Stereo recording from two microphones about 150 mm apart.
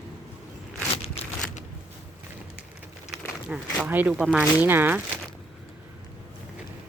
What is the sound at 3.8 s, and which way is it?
Speech, 10° right (ahead or behind).